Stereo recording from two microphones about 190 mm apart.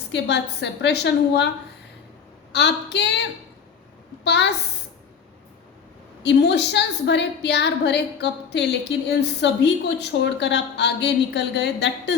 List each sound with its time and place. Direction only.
0.1 s a woman's voice: 65° left (ahead or behind)
2.5 s a woman's voice: 65° left (ahead or behind)
6.2 s a woman's voice: 65° left (ahead or behind)